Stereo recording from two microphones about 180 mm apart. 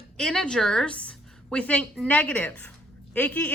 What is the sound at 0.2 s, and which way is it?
A woman's voice, 5° left (ahead or behind).